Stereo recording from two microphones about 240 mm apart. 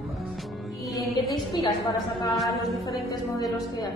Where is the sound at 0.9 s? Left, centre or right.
Centre.